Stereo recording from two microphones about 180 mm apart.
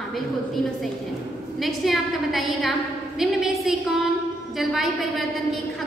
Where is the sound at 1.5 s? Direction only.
Centre (ahead or behind).